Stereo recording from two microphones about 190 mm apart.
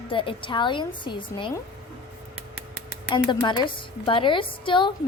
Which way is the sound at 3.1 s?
25° left (ahead or behind).